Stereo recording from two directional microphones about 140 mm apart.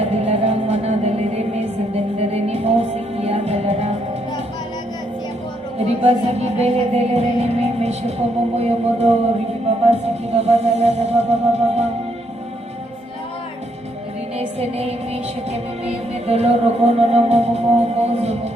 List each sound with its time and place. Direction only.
0.0 s music: 45° right (ahead or behind)
5.8 s music: 45° right (ahead or behind)
14.3 s music: 50° right (ahead or behind)